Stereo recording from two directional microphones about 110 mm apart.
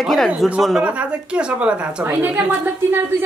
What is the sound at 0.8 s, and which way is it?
A woman's voice, 10° right (ahead or behind).